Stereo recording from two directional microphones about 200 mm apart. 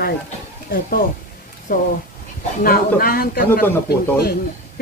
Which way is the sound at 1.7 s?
45° left (ahead or behind).